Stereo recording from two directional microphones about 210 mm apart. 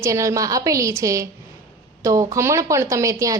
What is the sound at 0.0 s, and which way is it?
Speech, 15° right (ahead or behind).